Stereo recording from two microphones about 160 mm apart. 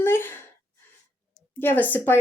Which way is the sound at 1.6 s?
10° left (ahead or behind).